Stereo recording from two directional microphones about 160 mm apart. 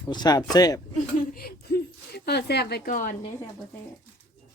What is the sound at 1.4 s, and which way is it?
A woman's voice, 70° left (ahead or behind).